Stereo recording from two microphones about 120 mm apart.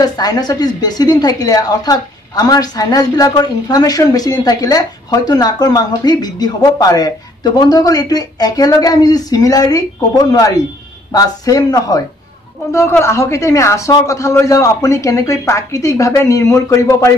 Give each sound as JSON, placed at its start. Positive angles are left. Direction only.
{"t": 0.0, "sound": "a woman's voice", "side_deg": 35}
{"t": 13.0, "sound": "a man's voice", "side_deg": 25}